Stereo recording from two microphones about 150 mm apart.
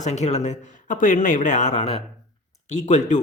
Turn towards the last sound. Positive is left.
turn(degrees=55)  # may be behind; listen again after turning